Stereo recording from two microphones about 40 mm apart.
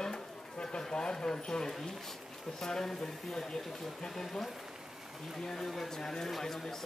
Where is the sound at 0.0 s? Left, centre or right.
Left.